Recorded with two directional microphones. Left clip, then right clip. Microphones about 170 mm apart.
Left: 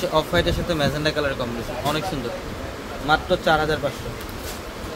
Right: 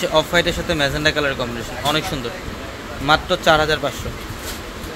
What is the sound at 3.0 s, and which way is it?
Speech, 35° right (ahead or behind).